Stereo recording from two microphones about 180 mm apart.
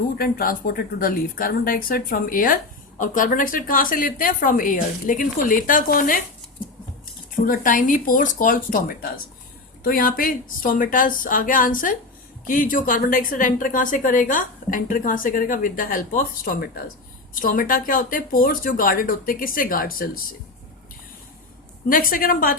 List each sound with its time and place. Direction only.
0.2 s a woman's voice: 55° left (ahead or behind)
7.3 s a woman's voice: 50° left (ahead or behind)
21.8 s a woman's voice: 50° left (ahead or behind)